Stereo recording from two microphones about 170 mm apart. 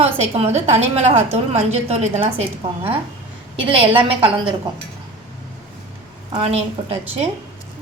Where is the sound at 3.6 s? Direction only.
30° right (ahead or behind).